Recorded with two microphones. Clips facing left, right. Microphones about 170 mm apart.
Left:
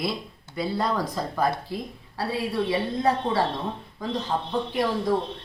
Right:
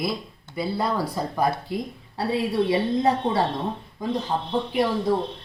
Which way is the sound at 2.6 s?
20° right (ahead or behind).